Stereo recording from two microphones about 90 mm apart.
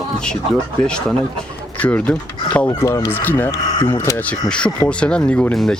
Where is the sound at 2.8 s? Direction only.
35° left (ahead or behind).